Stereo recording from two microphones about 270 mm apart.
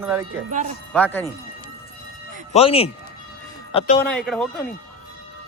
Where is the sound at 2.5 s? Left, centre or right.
Left.